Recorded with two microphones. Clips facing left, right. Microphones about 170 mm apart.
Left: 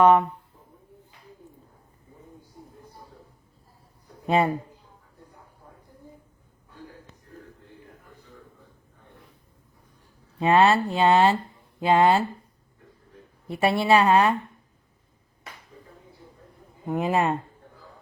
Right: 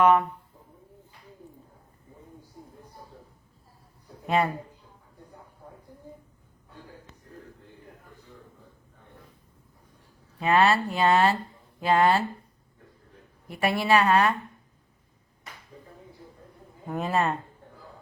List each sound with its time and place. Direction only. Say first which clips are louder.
0.0 s speech: left 3 dB; 30° left (ahead or behind)
4.3 s speech: left 3 dB; 30° left (ahead or behind)
10.4 s speech: left 3 dB; 30° left (ahead or behind)
13.5 s speech: left 3 dB; 30° left (ahead or behind)
16.8 s speech: left 3 dB; 15° left (ahead or behind)